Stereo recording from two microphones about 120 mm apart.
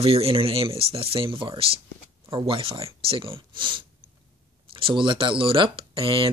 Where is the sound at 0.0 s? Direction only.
55° right (ahead or behind).